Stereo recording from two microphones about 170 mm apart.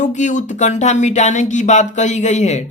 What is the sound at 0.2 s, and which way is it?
Speech, 45° left (ahead or behind).